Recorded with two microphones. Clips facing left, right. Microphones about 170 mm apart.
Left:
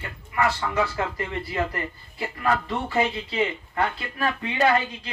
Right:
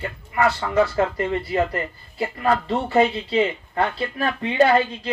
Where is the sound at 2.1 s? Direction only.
35° right (ahead or behind).